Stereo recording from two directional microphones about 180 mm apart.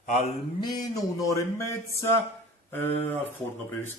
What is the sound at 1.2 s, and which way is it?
Speech, 15° left (ahead or behind).